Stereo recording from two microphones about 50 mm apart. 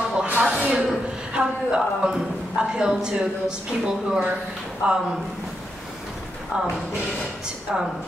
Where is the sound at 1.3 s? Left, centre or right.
Centre.